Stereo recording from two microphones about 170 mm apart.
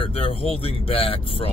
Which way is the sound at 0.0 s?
35° left (ahead or behind).